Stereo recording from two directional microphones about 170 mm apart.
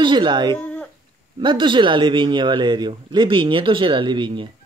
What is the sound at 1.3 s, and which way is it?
Speech, 30° right (ahead or behind).